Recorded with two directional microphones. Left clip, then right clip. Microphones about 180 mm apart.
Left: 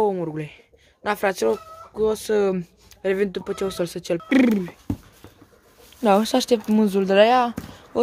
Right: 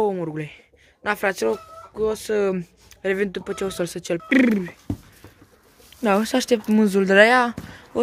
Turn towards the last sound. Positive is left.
turn(degrees=0)  # may be behind; listen again after turning